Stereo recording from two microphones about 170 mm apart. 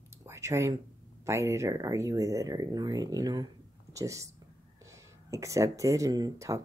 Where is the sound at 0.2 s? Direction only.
15° right (ahead or behind).